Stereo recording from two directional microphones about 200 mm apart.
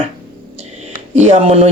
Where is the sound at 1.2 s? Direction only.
35° right (ahead or behind).